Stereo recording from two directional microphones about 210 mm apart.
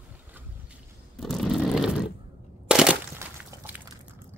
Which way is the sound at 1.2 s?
Centre (ahead or behind).